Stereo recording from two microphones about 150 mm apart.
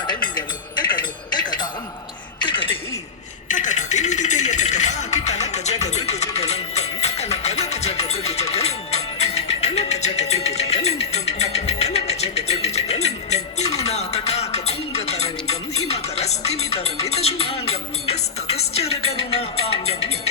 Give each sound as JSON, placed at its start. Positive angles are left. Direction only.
{"t": 0.1, "sound": "music", "side_deg": 30}
{"t": 2.4, "sound": "a sound", "side_deg": 35}
{"t": 3.5, "sound": "music", "side_deg": 55}